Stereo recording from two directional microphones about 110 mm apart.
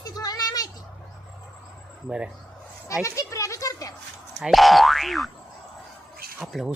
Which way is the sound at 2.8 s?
30° left (ahead or behind).